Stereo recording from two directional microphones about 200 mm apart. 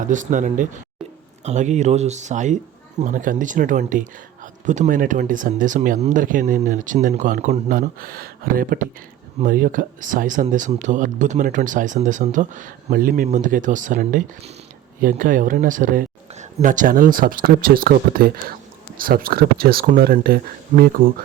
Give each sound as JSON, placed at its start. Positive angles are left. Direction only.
{"t": 0.0, "sound": "speech", "side_deg": -40}